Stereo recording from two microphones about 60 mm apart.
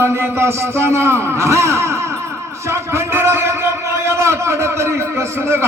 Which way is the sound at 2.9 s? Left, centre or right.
Right.